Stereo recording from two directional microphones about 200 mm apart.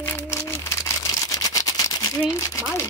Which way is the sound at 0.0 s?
10° left (ahead or behind).